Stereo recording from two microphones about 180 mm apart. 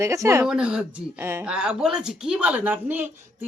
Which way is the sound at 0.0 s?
15° right (ahead or behind).